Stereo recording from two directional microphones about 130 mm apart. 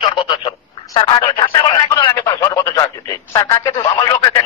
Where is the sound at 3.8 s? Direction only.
35° left (ahead or behind).